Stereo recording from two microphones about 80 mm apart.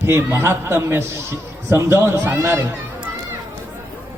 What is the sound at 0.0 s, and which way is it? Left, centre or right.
A man's voice, right.